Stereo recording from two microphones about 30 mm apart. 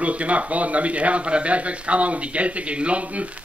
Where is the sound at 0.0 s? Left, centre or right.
Right.